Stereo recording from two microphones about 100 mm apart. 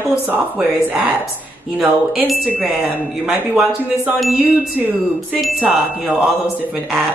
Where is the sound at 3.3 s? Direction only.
15° right (ahead or behind).